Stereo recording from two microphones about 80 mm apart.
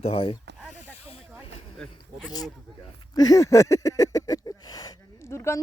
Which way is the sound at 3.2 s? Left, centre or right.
Left.